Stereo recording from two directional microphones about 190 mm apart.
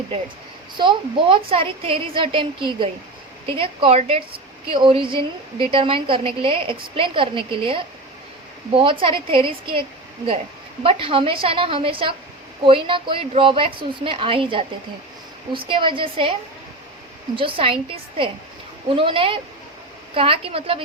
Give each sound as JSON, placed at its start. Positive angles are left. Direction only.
{"t": 0.8, "sound": "a woman's voice", "side_deg": -25}
{"t": 10.8, "sound": "a woman's voice", "side_deg": -30}
{"t": 17.3, "sound": "a woman's voice", "side_deg": -30}